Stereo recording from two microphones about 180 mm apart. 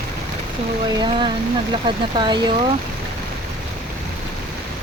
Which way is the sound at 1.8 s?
25° right (ahead or behind).